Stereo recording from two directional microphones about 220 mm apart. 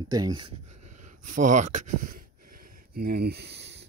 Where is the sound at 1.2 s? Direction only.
35° right (ahead or behind); by 3.7 s 50° right (ahead or behind).